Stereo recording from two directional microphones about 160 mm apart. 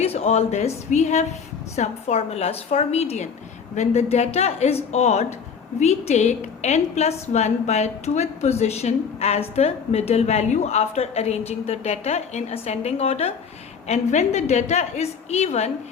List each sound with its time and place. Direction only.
0.0 s a woman's voice: 40° left (ahead or behind)